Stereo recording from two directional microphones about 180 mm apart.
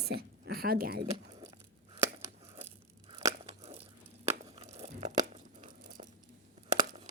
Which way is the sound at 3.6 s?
35° right (ahead or behind).